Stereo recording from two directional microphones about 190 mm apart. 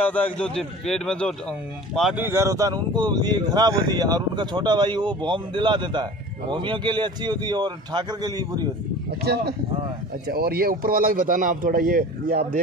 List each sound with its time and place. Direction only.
0.0 s a man's voice: 10° left (ahead or behind)
2.2 s speech: 15° right (ahead or behind)
9.2 s a man's voice: 55° right (ahead or behind)